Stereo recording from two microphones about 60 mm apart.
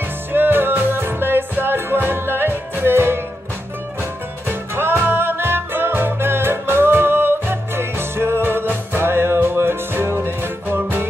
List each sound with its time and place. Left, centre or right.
0.3 s music: right
4.5 s music: right